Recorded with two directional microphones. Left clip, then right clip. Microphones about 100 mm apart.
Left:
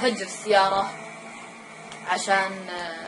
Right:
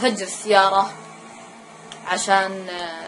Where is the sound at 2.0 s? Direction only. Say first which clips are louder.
Right 4 dB; 60° right (ahead or behind).